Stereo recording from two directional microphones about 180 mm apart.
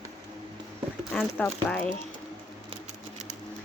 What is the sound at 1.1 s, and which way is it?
Speech, 5° left (ahead or behind).